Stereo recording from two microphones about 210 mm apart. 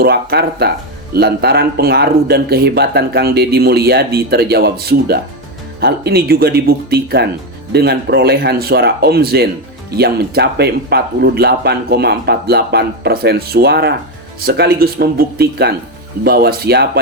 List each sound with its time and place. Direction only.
0.0 s speech: 50° right (ahead or behind)